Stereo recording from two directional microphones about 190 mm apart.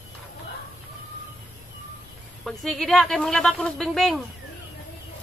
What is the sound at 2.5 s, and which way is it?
Speech, centre (ahead or behind).